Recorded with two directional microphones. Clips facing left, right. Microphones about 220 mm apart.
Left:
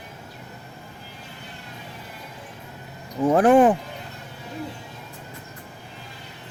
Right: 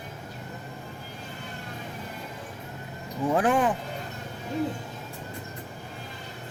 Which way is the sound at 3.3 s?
55° left (ahead or behind).